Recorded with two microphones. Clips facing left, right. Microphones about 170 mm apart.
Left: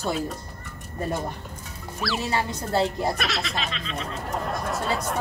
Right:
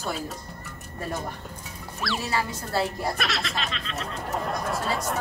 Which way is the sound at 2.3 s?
25° left (ahead or behind).